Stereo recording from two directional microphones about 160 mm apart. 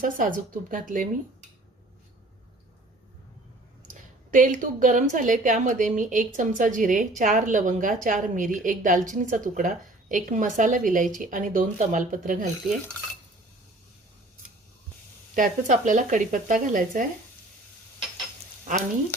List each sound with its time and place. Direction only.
0.0 s a woman's voice: 55° right (ahead or behind)
4.3 s a woman's voice: 55° right (ahead or behind)
15.4 s speech: 50° right (ahead or behind)
18.7 s a woman's voice: 55° right (ahead or behind)